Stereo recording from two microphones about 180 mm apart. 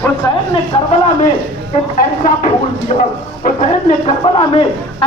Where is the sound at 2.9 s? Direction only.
35° left (ahead or behind).